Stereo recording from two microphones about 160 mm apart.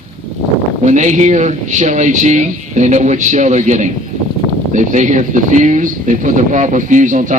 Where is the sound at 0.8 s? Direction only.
50° right (ahead or behind).